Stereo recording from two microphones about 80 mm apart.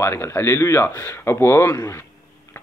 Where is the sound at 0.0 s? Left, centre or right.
Left.